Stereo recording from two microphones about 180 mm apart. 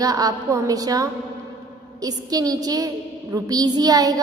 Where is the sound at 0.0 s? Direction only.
20° right (ahead or behind).